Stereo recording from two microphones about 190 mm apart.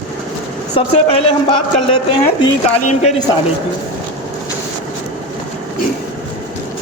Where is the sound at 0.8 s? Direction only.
30° left (ahead or behind).